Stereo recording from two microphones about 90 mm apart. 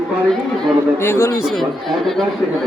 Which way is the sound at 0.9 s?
30° left (ahead or behind).